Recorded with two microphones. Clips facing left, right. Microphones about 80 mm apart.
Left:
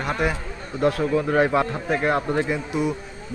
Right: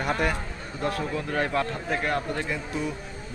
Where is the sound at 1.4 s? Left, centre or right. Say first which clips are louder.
Left 4 dB; centre.